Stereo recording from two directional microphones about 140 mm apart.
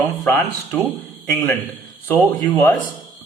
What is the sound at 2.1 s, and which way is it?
Speech, 10° left (ahead or behind).